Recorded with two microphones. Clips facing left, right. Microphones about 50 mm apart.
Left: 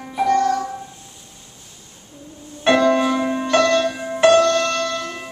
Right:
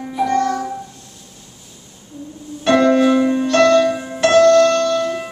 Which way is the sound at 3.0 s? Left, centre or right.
Centre.